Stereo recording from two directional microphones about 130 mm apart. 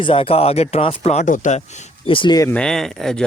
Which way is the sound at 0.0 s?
45° left (ahead or behind).